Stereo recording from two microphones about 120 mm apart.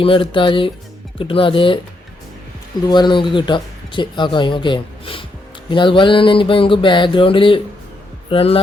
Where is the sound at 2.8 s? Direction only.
35° left (ahead or behind).